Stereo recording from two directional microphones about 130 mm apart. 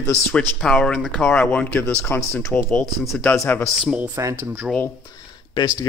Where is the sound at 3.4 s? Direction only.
15° left (ahead or behind).